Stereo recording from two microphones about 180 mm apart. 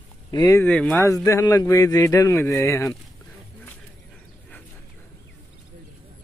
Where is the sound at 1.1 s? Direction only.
15° left (ahead or behind).